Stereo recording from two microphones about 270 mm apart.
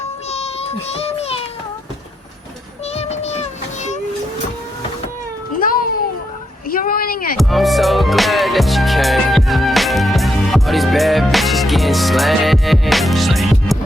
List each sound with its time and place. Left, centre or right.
0.3 s child singing: left
2.9 s child singing: left
6.7 s a sound: left
7.3 s music: centre